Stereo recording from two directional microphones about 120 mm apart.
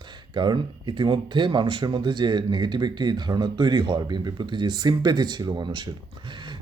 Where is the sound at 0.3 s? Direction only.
40° right (ahead or behind).